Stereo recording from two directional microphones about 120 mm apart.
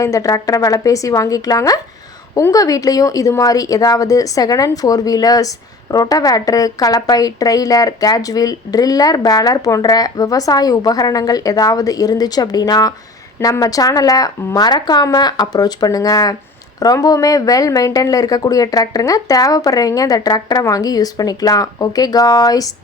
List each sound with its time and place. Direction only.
0.0 s speech: 30° left (ahead or behind)